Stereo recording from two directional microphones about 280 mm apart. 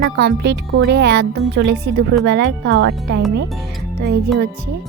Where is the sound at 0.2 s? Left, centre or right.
Right.